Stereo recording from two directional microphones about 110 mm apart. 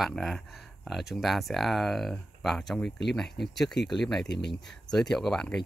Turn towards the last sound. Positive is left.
turn(degrees=5)  # may be behind; listen again after turning